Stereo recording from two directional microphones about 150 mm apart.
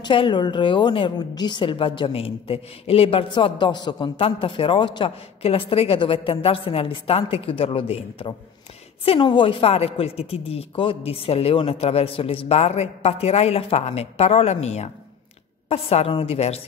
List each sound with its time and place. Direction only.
0.0 s a woman's voice: 30° left (ahead or behind)